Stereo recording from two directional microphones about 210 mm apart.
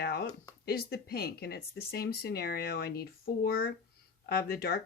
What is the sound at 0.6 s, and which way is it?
Speech, 50° left (ahead or behind).